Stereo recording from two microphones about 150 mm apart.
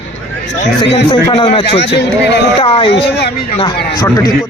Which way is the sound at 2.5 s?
35° left (ahead or behind).